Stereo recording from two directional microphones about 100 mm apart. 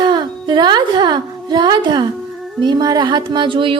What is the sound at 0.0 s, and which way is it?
A woman's voice, 50° right (ahead or behind).